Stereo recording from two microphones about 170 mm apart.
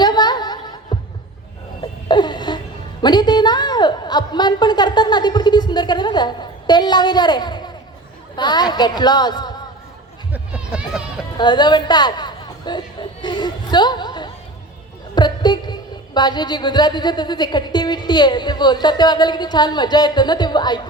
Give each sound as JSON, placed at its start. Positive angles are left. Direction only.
{"t": 0.0, "sound": "chuckle", "side_deg": 25}
{"t": 1.8, "sound": "a sound", "side_deg": 25}
{"t": 8.4, "sound": "a woman's voice", "side_deg": 25}
{"t": 10.3, "sound": "run", "side_deg": -5}
{"t": 11.3, "sound": "chatter", "side_deg": 25}
{"t": 15.1, "sound": "a woman's voice", "side_deg": 25}